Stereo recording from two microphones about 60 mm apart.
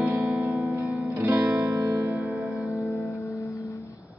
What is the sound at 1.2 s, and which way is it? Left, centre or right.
Music, right.